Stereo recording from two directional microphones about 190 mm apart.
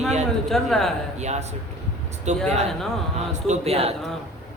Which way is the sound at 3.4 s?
35° right (ahead or behind).